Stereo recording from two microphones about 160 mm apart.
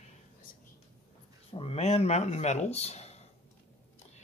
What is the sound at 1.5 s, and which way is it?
Speech, 35° left (ahead or behind).